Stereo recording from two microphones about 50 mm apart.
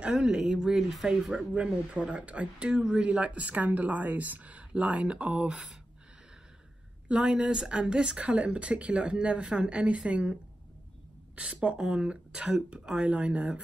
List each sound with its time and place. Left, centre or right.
0.0 s speech: right; by 1.0 s centre
1.3 s speech: right
2.7 s speech: centre
3.0 s speech: right
7.1 s speech: right
11.3 s speech: right